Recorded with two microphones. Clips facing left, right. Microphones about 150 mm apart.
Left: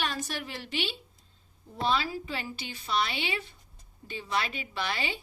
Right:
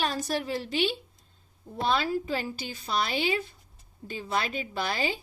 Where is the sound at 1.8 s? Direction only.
50° right (ahead or behind).